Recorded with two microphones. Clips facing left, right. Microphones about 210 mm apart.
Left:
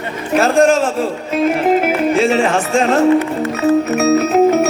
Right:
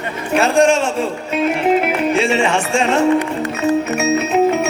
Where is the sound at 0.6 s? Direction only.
Centre (ahead or behind).